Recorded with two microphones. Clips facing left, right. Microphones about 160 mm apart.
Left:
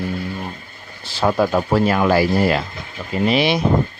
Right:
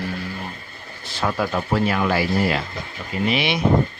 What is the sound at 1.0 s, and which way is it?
Speech, 30° left (ahead or behind).